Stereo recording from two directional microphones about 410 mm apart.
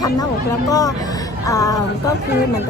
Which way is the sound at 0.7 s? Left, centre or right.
Centre.